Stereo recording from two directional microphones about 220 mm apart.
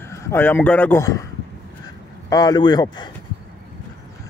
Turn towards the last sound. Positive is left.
turn(degrees=20)  # may be behind; listen again after turning